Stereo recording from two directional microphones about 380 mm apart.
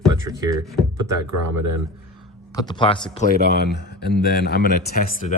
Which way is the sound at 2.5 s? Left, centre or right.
Centre.